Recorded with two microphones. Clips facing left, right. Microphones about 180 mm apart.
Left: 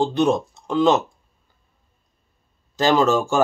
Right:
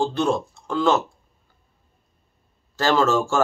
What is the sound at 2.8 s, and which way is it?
Speech, 15° left (ahead or behind).